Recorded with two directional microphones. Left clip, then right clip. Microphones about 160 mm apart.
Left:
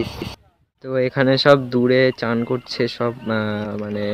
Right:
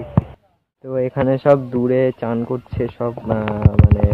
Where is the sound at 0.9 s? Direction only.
25° left (ahead or behind).